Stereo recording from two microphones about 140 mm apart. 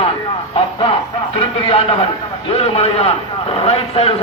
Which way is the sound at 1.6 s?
45° left (ahead or behind).